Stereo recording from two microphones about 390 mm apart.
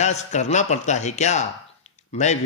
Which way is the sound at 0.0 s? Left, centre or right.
Centre.